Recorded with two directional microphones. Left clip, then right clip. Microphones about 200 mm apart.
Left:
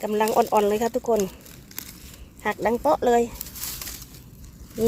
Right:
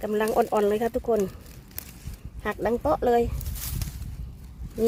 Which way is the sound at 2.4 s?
5° left (ahead or behind).